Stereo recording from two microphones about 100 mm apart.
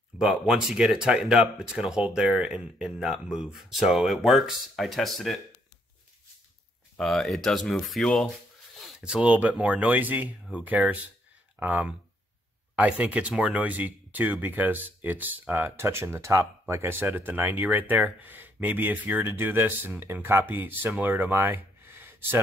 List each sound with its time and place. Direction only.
0.2 s speech: 5° right (ahead or behind)
7.0 s speech: centre (ahead or behind)
9.0 s speech: 10° right (ahead or behind)